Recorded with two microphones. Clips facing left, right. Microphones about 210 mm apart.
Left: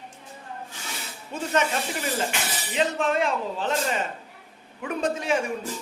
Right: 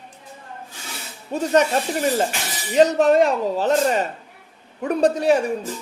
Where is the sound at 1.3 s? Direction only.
40° right (ahead or behind).